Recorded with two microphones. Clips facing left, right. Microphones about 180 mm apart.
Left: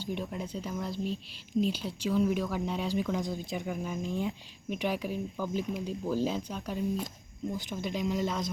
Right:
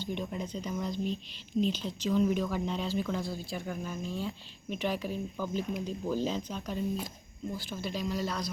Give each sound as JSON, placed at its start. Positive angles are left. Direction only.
{"t": 0.0, "sound": "speech", "side_deg": 5}
{"t": 7.5, "sound": "speech", "side_deg": 20}